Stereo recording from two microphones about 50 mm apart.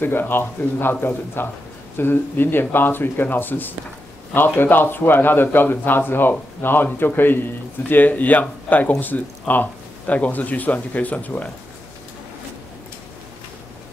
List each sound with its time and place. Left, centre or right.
0.0 s speech: left